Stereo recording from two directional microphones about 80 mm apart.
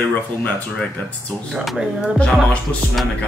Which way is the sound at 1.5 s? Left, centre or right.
Centre.